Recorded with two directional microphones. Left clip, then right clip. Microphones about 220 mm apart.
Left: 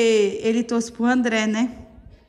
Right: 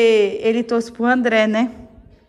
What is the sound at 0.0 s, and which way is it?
A woman's voice, 25° left (ahead or behind).